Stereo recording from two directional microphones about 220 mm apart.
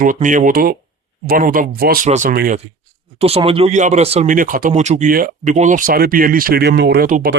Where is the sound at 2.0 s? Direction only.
35° right (ahead or behind).